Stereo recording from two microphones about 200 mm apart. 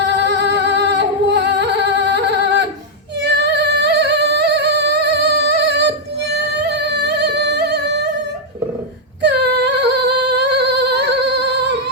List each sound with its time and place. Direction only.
0.0 s singing: 55° right (ahead or behind)
9.2 s singing: 55° right (ahead or behind)